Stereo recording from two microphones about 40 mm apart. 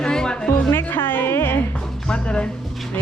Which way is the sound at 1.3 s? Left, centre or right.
Left.